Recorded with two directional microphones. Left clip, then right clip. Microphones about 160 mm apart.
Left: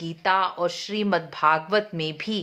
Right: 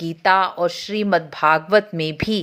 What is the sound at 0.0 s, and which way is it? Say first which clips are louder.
Speech: right 6 dB; 30° right (ahead or behind).